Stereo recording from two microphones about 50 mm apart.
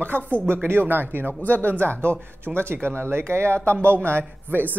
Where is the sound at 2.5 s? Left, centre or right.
Centre.